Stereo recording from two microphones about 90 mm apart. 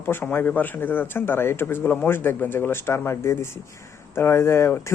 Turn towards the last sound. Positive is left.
turn(degrees=30)  # may be behind; listen again after turning